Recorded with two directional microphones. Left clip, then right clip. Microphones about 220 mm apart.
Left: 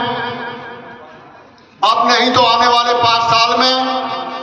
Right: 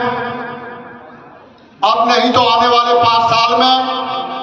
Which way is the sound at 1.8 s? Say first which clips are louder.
Even; 30° right (ahead or behind).